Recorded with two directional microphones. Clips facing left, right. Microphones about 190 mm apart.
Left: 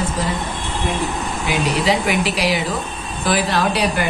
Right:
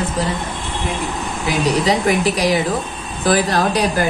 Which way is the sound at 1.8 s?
40° right (ahead or behind).